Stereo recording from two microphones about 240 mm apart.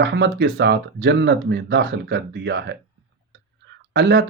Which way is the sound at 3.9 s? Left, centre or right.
Right.